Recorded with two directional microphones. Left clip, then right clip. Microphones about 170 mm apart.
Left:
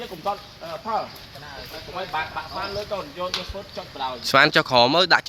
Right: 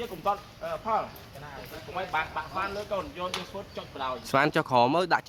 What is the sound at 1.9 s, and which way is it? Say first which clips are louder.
Speech: left 2 dB; 40° left (ahead or behind).